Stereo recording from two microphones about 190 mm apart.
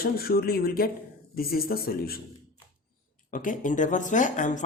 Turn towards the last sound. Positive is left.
turn(degrees=40)  # may be behind; listen again after turning